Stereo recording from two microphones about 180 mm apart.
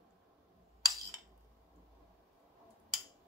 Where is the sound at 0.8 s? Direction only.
20° right (ahead or behind).